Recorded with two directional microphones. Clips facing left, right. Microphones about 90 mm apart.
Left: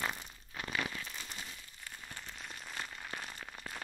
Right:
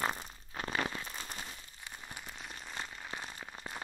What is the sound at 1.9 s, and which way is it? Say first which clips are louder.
Rain on surface: right 1 dB; 15° right (ahead or behind).